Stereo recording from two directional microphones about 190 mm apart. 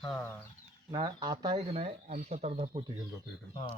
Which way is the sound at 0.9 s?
20° right (ahead or behind).